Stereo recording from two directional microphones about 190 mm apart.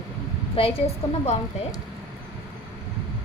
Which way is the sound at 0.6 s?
30° left (ahead or behind).